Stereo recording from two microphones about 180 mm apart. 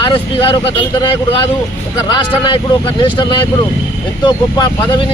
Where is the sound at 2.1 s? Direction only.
25° left (ahead or behind).